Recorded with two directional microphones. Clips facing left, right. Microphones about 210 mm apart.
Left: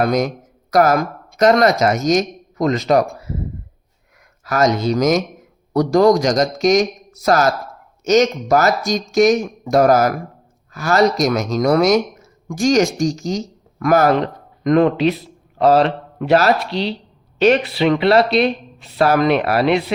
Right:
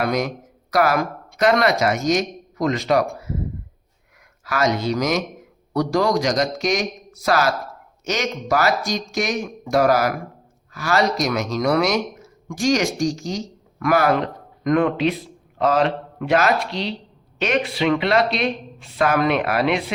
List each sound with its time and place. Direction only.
0.0 s speech: 45° left (ahead or behind)
4.4 s speech: 45° left (ahead or behind)